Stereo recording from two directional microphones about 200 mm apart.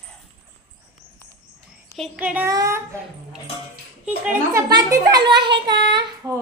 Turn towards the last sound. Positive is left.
turn(degrees=-15)  # may be behind; listen again after turning